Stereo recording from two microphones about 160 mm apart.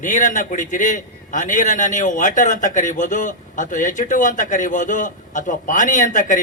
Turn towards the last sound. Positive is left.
turn(degrees=50)  # may be behind; listen again after turning